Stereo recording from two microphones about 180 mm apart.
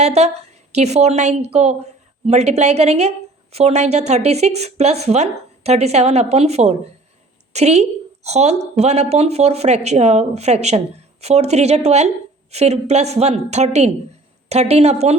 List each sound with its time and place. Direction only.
0.0 s a woman's voice: 35° right (ahead or behind)